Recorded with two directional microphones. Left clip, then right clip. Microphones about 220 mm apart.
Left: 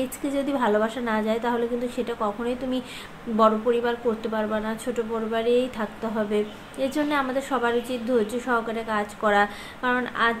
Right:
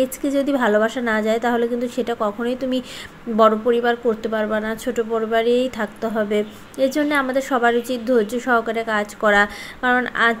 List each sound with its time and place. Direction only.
0.2 s speech: 25° right (ahead or behind)